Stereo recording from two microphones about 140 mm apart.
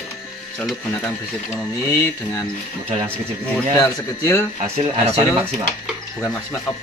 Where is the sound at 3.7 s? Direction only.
20° left (ahead or behind).